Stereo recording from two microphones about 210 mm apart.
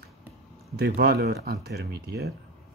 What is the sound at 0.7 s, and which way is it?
Speech, 50° right (ahead or behind).